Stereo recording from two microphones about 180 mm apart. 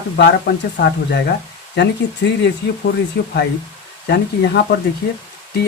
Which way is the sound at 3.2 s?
60° left (ahead or behind).